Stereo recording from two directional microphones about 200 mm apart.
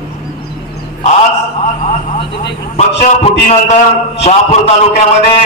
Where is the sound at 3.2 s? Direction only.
35° left (ahead or behind).